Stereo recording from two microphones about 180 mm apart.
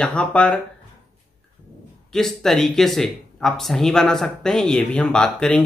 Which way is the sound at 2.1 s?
Centre (ahead or behind).